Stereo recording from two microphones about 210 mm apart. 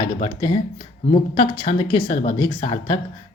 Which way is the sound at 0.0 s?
25° left (ahead or behind).